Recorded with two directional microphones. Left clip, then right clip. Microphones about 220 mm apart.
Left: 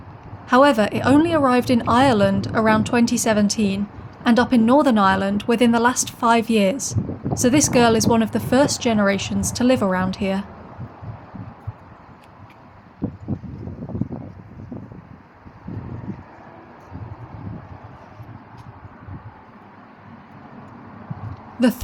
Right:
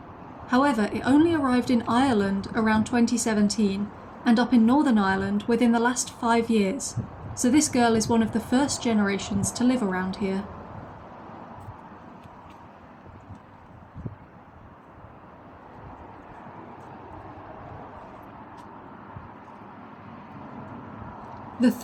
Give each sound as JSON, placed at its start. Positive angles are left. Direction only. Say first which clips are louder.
{"t": 0.4, "sound": "a woman's voice", "louder": "left 8 dB", "side_deg": 45}